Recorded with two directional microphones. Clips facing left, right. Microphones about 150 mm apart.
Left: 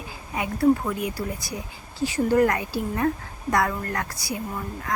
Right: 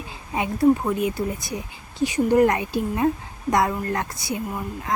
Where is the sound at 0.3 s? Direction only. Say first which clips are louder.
Right 2 dB; 25° right (ahead or behind).